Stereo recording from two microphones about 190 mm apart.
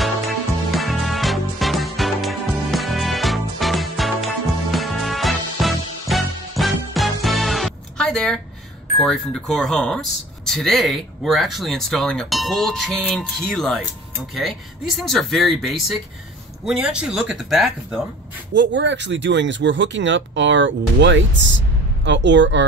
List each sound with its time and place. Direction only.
0.0 s music: centre (ahead or behind)
8.9 s speech: centre (ahead or behind)
18.5 s speech: 65° right (ahead or behind)